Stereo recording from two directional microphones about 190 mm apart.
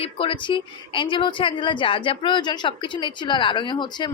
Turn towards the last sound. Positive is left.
turn(degrees=25)  # may be behind; listen again after turning